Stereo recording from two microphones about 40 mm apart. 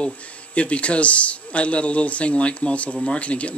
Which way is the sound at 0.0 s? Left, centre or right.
Left.